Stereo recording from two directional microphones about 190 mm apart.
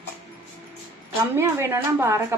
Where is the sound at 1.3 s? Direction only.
15° right (ahead or behind).